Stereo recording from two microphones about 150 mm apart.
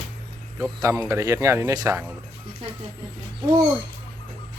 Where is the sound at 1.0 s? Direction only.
20° right (ahead or behind).